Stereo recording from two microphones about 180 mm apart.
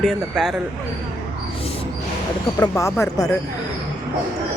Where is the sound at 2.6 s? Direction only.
20° left (ahead or behind).